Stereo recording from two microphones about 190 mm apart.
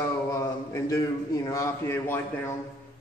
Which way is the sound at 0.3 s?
15° left (ahead or behind).